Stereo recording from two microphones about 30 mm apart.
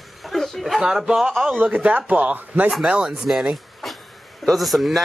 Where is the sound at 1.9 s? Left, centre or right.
Right.